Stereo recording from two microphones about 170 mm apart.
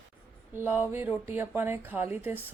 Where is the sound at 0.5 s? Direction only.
10° right (ahead or behind).